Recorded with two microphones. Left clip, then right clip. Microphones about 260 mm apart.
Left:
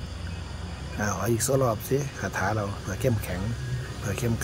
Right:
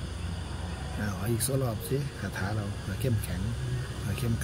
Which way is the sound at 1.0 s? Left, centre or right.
Centre.